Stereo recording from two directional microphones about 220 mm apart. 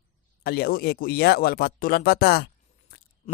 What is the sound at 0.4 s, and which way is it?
A man's voice, 45° left (ahead or behind).